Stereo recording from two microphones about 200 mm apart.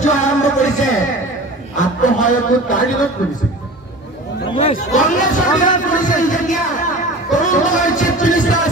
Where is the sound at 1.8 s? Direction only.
40° left (ahead or behind).